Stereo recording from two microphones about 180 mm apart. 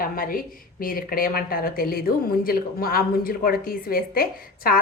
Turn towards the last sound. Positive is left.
turn(degrees=55)  # may be behind; listen again after turning